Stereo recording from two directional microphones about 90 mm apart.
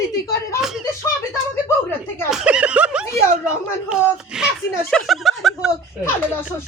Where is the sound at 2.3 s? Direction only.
10° right (ahead or behind).